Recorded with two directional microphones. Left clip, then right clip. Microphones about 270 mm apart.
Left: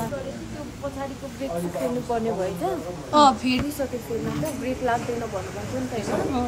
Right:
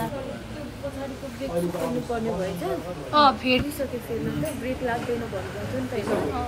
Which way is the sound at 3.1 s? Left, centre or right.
Centre.